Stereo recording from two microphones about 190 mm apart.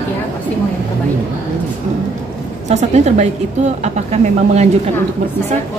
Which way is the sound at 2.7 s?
35° right (ahead or behind).